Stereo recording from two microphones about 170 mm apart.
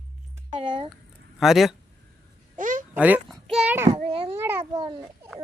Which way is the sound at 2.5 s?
50° right (ahead or behind).